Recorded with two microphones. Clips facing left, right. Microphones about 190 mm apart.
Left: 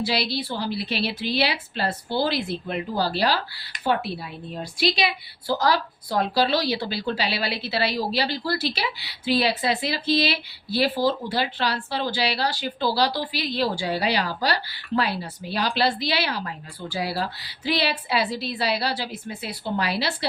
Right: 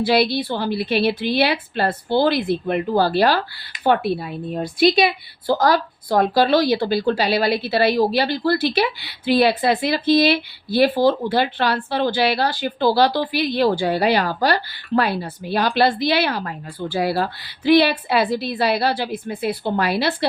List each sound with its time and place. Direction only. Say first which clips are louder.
0.0 s a woman's voice: right 8 dB; 55° right (ahead or behind)